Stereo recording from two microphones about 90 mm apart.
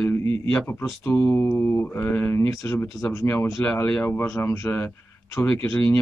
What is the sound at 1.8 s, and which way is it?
Speech, 20° left (ahead or behind).